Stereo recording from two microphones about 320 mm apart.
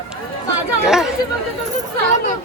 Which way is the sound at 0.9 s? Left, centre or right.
Centre.